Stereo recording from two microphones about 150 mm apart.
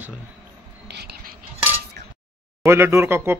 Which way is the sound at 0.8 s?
90° right.